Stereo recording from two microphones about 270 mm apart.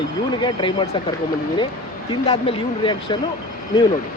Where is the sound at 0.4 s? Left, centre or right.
Centre.